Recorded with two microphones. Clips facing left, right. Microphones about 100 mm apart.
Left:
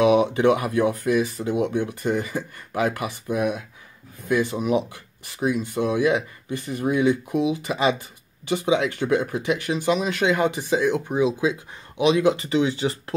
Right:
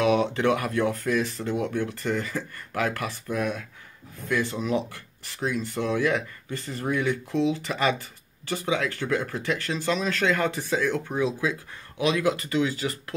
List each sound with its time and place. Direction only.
0.0 s speech: 15° left (ahead or behind)